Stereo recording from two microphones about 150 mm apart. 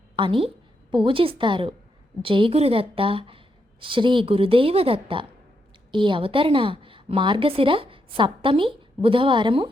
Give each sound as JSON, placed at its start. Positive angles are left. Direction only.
{"t": 0.2, "sound": "a woman's voice", "side_deg": -35}